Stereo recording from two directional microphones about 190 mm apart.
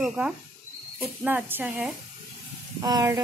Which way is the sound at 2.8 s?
20° right (ahead or behind).